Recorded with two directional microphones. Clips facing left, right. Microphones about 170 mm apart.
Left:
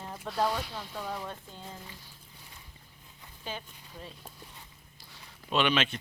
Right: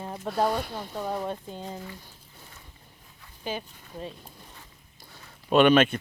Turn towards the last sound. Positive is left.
turn(degrees=-50)  # may be behind; listen again after turning